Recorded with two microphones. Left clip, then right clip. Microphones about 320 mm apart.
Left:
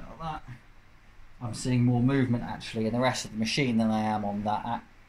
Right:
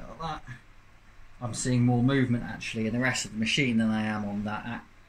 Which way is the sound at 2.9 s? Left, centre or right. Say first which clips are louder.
Left 2 dB; centre.